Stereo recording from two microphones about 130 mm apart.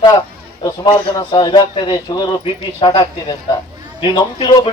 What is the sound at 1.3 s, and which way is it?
Speech, 40° left (ahead or behind).